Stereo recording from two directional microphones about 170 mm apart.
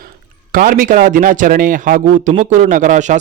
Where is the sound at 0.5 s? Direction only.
55° right (ahead or behind).